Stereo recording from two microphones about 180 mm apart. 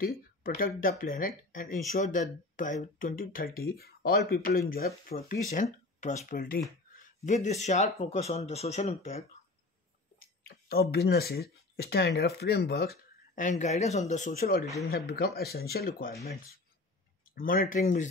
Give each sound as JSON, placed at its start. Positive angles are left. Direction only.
{"t": 0.0, "sound": "speech", "side_deg": 55}
{"t": 7.2, "sound": "speech", "side_deg": 40}
{"t": 10.2, "sound": "speech", "side_deg": 55}
{"t": 17.4, "sound": "speech", "side_deg": 50}